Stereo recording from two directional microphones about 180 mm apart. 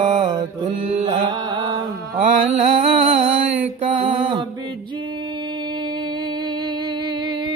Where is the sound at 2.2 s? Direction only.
40° right (ahead or behind).